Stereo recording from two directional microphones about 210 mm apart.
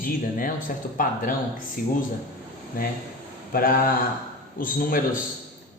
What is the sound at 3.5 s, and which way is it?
A man's voice, 45° left (ahead or behind).